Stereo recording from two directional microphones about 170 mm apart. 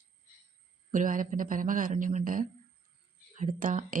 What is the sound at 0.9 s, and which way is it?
A woman's voice, 50° right (ahead or behind).